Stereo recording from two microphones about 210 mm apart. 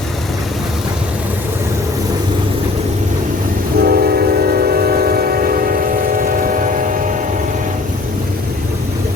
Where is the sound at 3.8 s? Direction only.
45° right (ahead or behind).